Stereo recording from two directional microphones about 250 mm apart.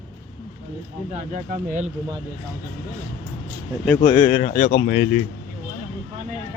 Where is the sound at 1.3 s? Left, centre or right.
Right.